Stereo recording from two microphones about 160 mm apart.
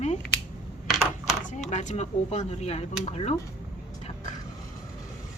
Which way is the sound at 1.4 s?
45° left (ahead or behind).